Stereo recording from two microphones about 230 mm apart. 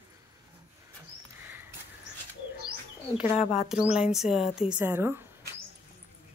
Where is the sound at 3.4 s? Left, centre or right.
Left.